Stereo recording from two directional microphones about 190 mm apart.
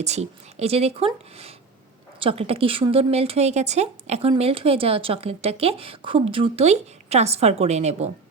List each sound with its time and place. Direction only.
0.0 s a woman's voice: 35° right (ahead or behind)